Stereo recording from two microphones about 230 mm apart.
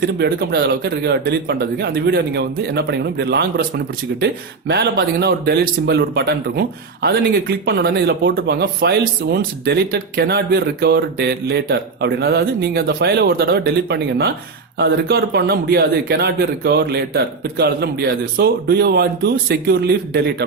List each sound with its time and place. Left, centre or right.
0.0 s speech: right
4.7 s speech: right